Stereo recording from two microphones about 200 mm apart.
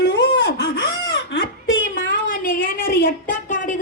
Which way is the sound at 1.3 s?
70° left (ahead or behind).